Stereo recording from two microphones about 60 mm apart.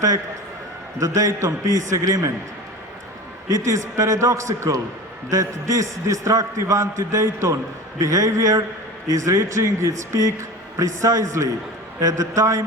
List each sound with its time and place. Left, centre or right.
0.9 s a man's voice: right
3.5 s a man's voice: right
9.1 s a man's voice: right
11.9 s a man's voice: right